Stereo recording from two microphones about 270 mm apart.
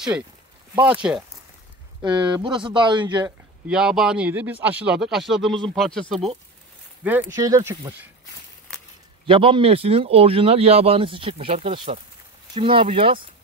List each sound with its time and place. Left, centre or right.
0.8 s speech: centre
2.4 s speech: centre
3.3 s speech: centre
9.2 s speech: centre